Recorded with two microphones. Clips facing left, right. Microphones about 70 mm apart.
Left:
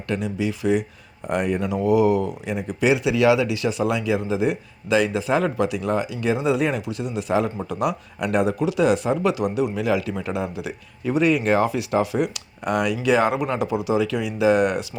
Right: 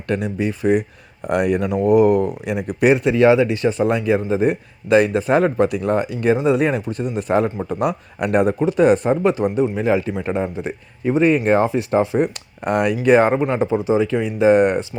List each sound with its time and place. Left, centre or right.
0.1 s speech: right
1.3 s speech: right